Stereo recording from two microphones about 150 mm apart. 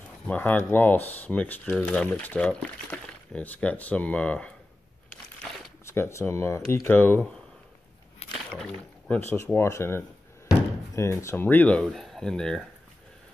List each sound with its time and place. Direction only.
0.3 s speech: 10° left (ahead or behind)
5.9 s speech: 20° left (ahead or behind)
8.5 s a sound: 5° left (ahead or behind)
9.6 s speech: 15° left (ahead or behind)